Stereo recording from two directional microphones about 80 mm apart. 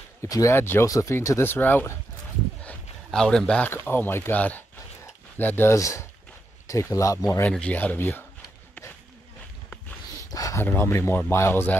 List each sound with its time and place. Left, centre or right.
0.3 s speech: left
0.6 s speech: left
0.8 s speech: left
1.1 s speech: left
3.1 s a man's voice: centre
3.6 s speech: left
5.8 s speech: left
7.4 s a man's voice: centre
7.7 s speech: left
10.3 s a sound: left
10.6 s speech: left